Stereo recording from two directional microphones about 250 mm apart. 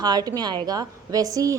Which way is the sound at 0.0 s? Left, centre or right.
Centre.